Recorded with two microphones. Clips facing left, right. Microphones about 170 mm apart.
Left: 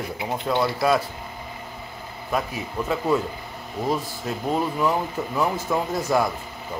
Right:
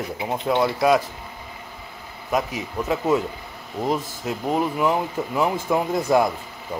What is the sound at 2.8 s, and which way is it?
Speech, 15° right (ahead or behind).